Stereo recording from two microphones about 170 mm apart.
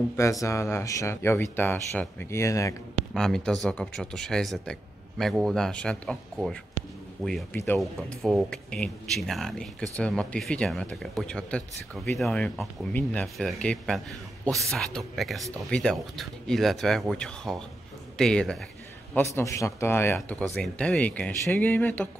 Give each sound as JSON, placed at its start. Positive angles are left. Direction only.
{"t": 0.1, "sound": "speech", "side_deg": 20}
{"t": 3.2, "sound": "speech", "side_deg": 5}
{"t": 7.8, "sound": "speech", "side_deg": 0}
{"t": 19.1, "sound": "speech", "side_deg": 15}